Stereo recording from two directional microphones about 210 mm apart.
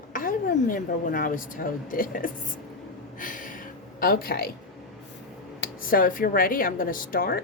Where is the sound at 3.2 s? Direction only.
40° left (ahead or behind).